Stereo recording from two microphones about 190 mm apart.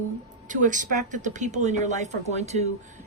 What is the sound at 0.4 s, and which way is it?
Speech, 40° right (ahead or behind).